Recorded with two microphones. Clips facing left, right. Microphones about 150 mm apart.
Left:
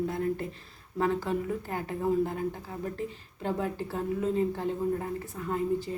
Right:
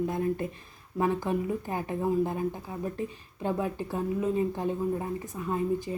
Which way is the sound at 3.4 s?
15° right (ahead or behind).